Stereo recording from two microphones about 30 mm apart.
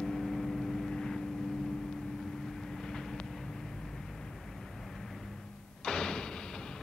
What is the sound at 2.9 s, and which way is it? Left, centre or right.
Vehicle, centre.